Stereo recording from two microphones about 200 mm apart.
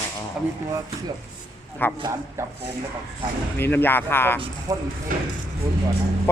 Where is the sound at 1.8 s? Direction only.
10° left (ahead or behind).